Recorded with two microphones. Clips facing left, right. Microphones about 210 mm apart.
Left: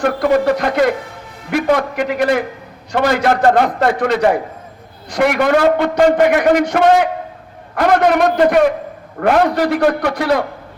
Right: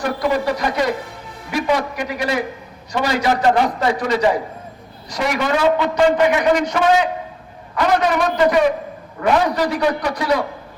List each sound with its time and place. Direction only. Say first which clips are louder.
0.0 s a man's voice: left 5 dB; 55° left (ahead or behind)